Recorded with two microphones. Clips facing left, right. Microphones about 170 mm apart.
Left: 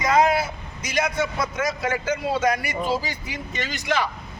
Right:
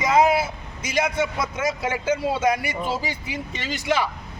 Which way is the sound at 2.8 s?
10° right (ahead or behind).